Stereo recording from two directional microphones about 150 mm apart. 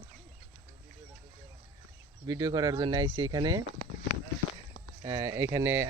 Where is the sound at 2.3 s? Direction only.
25° right (ahead or behind).